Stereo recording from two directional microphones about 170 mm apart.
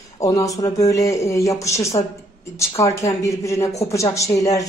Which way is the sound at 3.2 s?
20° left (ahead or behind).